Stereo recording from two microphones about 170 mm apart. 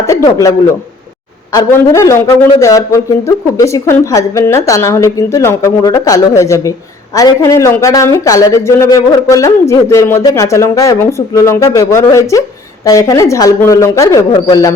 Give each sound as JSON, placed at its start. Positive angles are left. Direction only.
{"t": 0.1, "sound": "a man's voice", "side_deg": 20}
{"t": 1.5, "sound": "a man's voice", "side_deg": 20}